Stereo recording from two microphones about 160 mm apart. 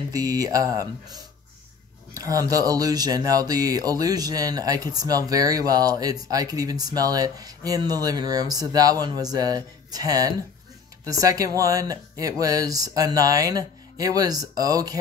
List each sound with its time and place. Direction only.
0.1 s speech: 20° right (ahead or behind)